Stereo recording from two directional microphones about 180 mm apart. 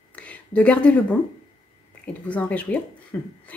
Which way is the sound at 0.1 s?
5° left (ahead or behind).